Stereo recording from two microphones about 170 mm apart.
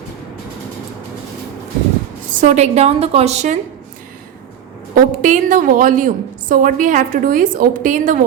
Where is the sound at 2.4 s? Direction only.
40° right (ahead or behind).